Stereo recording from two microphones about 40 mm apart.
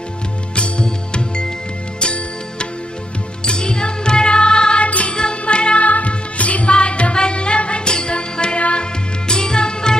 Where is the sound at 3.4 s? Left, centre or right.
Left.